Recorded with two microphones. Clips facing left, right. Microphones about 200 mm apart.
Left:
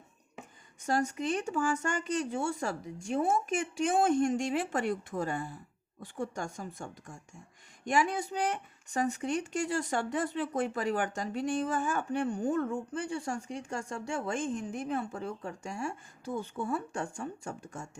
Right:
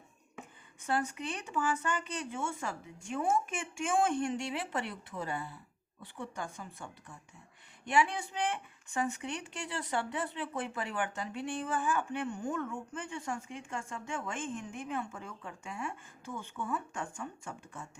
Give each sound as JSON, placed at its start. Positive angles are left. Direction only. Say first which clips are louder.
{"t": 0.9, "sound": "speech", "louder": "left 4 dB", "side_deg": 40}